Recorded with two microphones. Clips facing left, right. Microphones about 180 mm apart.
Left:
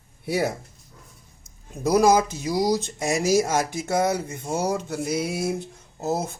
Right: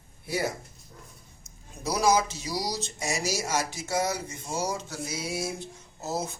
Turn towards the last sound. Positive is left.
turn(degrees=55)  # may be behind; listen again after turning